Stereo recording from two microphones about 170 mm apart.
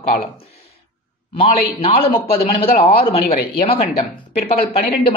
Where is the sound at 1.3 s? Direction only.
35° left (ahead or behind).